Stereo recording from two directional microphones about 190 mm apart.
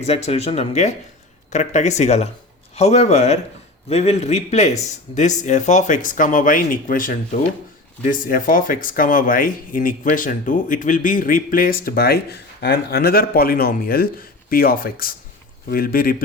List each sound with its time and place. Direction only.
0.0 s speech: 35° left (ahead or behind); by 16.2 s 50° left (ahead or behind)